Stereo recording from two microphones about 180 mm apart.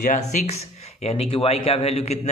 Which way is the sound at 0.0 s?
40° left (ahead or behind).